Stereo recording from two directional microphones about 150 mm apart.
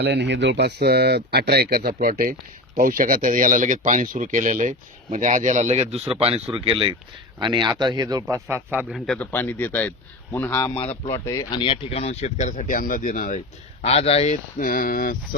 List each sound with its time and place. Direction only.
0.6 s a man's voice: 90° right; by 9.0 s 10° right (ahead or behind)
9.0 s a man's voice: 5° left (ahead or behind)
10.8 s speech: 40° left (ahead or behind)
11.1 s speech: 20° left (ahead or behind)
11.6 s speech: 35° left (ahead or behind); by 13.4 s 60° left (ahead or behind)
13.8 s speech: 45° left (ahead or behind)
14.6 s speech: 70° left (ahead or behind)